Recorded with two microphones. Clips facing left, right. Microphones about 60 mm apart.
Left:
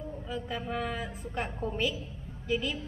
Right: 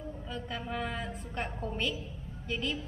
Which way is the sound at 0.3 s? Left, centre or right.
Centre.